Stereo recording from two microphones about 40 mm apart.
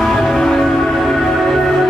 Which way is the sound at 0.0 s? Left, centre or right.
Centre.